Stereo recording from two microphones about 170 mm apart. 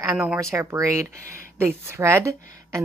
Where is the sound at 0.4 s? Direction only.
15° right (ahead or behind).